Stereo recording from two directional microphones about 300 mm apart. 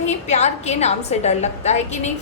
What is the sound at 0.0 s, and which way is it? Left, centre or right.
A woman's voice, left.